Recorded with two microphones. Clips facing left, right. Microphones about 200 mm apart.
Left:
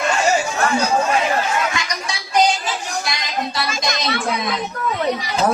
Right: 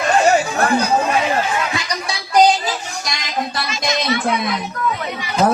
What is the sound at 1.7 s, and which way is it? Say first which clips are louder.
Music: right 2 dB; 35° right (ahead or behind).